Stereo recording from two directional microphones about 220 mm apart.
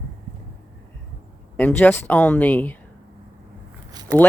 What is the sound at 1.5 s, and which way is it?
Speech, 5° left (ahead or behind).